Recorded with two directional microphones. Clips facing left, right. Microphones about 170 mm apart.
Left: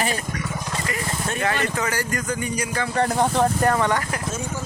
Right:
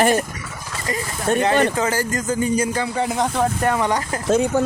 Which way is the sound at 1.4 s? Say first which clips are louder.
Right 5 dB; 20° right (ahead or behind).